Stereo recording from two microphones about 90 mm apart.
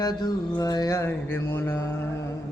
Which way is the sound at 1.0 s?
25° left (ahead or behind).